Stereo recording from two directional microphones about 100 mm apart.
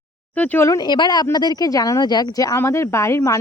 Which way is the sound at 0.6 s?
35° left (ahead or behind).